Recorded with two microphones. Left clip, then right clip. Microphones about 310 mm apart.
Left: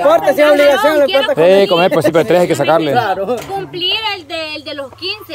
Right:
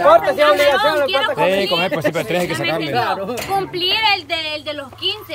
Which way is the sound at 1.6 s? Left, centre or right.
Centre.